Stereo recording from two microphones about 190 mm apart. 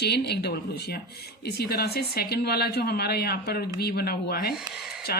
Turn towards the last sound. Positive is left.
turn(degrees=55)  # may be behind; listen again after turning